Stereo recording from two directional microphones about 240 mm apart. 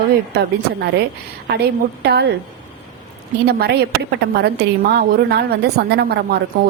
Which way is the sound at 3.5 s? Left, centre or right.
Right.